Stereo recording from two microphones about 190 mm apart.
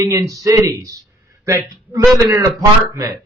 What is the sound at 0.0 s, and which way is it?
Speech, 20° right (ahead or behind).